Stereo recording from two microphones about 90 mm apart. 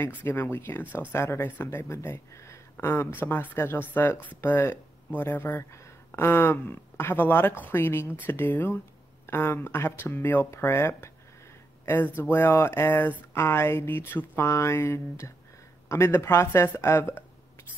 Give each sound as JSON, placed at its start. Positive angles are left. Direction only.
{"t": 0.0, "sound": "speech", "side_deg": 25}